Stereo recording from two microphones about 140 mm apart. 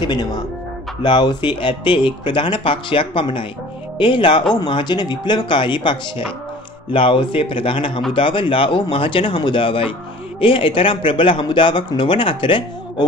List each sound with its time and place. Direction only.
0.0 s speech: 30° left (ahead or behind)